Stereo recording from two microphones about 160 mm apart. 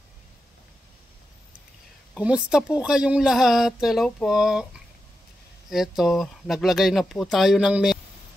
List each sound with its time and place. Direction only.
2.1 s speech: 5° right (ahead or behind)
5.7 s speech: centre (ahead or behind)